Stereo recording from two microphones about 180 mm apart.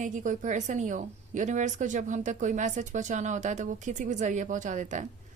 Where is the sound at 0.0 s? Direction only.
45° right (ahead or behind).